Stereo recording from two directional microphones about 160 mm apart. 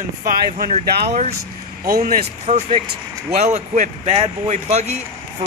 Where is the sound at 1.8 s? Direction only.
60° right (ahead or behind).